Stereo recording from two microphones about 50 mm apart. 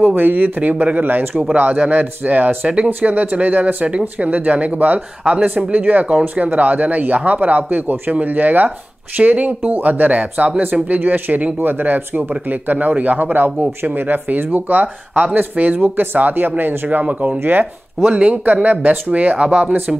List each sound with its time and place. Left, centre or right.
0.0 s speech: right
5.2 s speech: right
5.5 s speech: right
17.0 s speech: right
17.4 s speech: right